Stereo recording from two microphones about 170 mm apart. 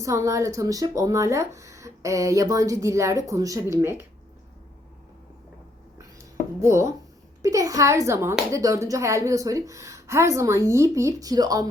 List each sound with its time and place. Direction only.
0.0 s speech: 20° right (ahead or behind)
6.6 s speech: 15° right (ahead or behind)